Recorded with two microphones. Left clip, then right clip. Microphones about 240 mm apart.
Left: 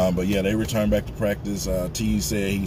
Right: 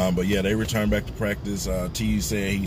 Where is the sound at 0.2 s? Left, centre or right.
Right.